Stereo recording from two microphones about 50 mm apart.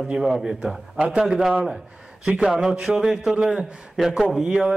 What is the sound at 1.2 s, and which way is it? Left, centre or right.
A man's voice, centre.